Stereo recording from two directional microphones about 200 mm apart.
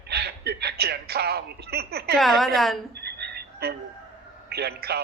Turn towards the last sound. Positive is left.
turn(degrees=-55)  # may be behind; listen again after turning